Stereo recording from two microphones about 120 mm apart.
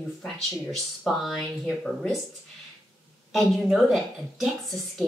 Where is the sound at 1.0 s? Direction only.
Centre (ahead or behind).